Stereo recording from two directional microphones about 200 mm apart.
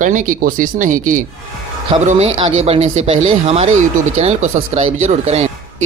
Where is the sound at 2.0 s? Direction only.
30° right (ahead or behind).